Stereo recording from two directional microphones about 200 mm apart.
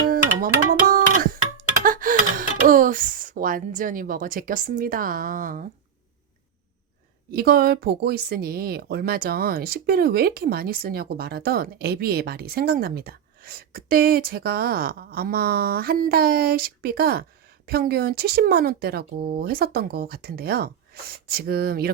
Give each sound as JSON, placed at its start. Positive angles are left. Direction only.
{"t": 0.1, "sound": "a sound", "side_deg": -45}
{"t": 2.6, "sound": "a woman's voice", "side_deg": -45}
{"t": 7.3, "sound": "a woman's voice", "side_deg": -50}